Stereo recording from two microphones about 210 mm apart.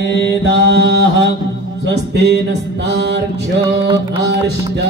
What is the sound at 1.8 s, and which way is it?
Music, 55° right (ahead or behind).